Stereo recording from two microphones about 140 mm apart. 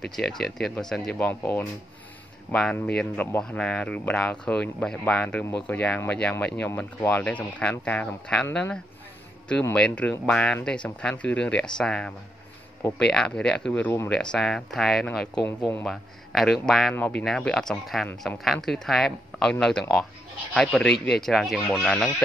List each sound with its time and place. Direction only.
0.0 s speech: centre (ahead or behind)
15.4 s speech: 15° left (ahead or behind)
15.8 s speech: centre (ahead or behind)